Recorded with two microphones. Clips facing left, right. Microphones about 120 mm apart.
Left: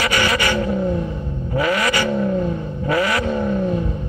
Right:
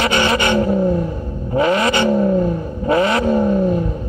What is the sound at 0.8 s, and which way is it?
Vehicle, 10° right (ahead or behind).